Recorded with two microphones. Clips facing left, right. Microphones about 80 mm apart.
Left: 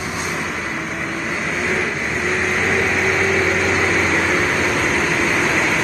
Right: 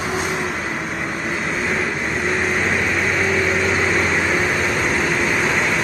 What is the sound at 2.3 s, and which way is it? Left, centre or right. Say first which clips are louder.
Vehicle: left 1 dB; centre.